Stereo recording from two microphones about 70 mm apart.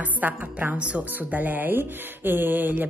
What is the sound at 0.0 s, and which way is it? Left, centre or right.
A woman's voice, right.